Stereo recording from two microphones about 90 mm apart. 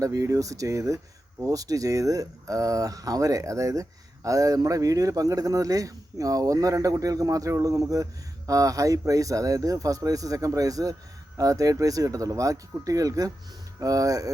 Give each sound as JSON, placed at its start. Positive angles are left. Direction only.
{"t": 0.0, "sound": "speech", "side_deg": -40}